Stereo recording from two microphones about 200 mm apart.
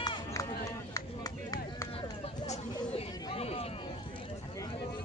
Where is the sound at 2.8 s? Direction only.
25° left (ahead or behind).